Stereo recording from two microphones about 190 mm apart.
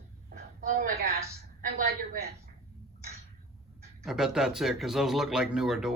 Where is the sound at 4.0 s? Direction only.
Centre (ahead or behind).